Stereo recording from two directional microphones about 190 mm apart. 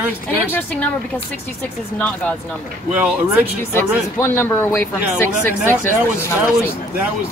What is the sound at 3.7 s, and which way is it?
Speech, 10° left (ahead or behind).